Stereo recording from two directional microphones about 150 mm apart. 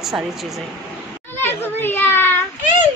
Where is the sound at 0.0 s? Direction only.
Centre (ahead or behind).